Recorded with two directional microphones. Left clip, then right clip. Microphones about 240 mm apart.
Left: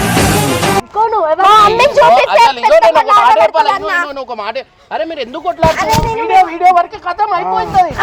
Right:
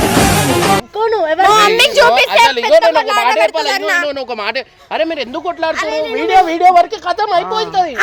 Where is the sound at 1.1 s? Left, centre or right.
Centre.